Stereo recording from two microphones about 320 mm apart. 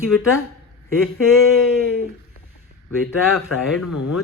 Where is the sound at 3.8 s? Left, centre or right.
Left.